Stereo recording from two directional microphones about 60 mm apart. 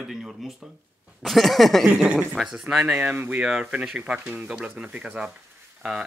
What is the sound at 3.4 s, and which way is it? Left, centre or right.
Speech, centre.